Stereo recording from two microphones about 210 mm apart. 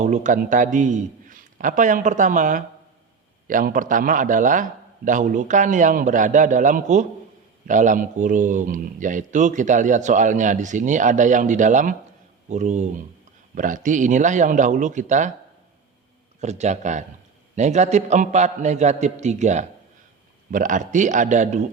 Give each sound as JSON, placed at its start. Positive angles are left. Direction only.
{"t": 0.0, "sound": "a man's voice", "side_deg": -35}
{"t": 16.4, "sound": "a man's voice", "side_deg": -30}